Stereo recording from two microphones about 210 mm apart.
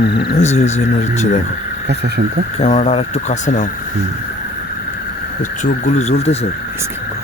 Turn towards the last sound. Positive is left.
turn(degrees=30)  # may be behind; listen again after turning